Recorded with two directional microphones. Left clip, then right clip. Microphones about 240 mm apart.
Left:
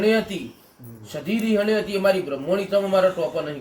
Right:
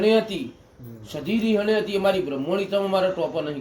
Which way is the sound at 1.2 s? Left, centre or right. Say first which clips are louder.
Left 1 dB; centre.